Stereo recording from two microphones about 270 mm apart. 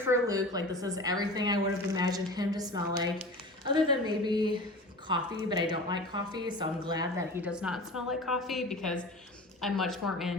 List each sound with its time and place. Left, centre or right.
0.0 s a woman's voice: centre